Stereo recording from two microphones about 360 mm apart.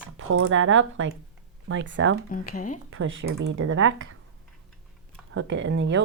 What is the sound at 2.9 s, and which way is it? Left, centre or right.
Speech, right.